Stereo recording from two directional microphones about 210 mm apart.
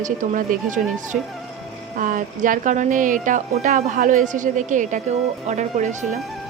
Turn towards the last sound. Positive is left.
turn(degrees=-35)  # may be behind; listen again after turning